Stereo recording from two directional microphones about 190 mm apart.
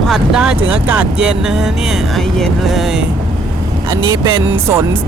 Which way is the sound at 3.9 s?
25° right (ahead or behind).